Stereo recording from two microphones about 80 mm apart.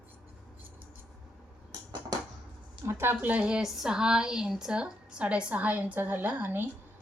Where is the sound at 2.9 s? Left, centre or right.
Right.